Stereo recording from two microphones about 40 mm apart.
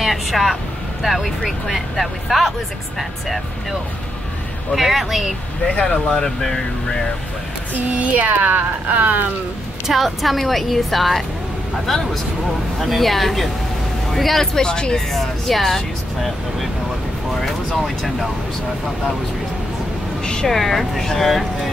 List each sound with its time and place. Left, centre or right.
0.0 s speech: centre
4.7 s speech: centre
5.9 s speech: centre
7.9 s speech: right
9.8 s speech: centre
15.1 s speech: centre
20.4 s speech: centre